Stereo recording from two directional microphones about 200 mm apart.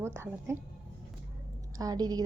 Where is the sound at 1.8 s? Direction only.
20° right (ahead or behind).